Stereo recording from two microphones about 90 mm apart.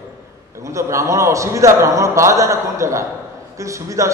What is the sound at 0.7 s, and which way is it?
A man's voice, 35° right (ahead or behind).